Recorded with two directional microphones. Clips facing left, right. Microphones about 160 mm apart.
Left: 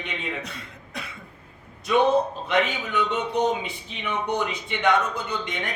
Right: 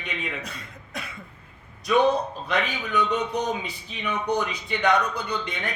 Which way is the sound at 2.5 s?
20° left (ahead or behind).